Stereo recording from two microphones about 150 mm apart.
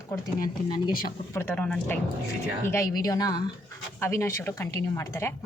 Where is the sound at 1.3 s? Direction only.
15° left (ahead or behind).